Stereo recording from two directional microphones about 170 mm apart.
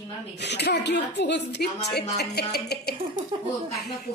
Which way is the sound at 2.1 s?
75° left (ahead or behind).